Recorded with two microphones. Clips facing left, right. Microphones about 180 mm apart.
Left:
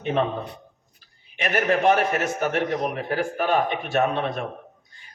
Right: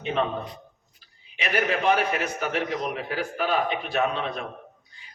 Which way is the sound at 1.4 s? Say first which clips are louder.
Left 4 dB; 45° left (ahead or behind).